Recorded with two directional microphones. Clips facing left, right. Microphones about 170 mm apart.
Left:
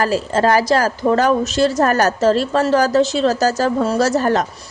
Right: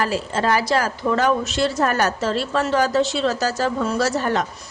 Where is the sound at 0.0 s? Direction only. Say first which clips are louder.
Left 5 dB; 40° left (ahead or behind).